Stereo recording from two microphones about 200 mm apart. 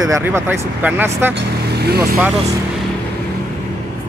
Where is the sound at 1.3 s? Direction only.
55° right (ahead or behind).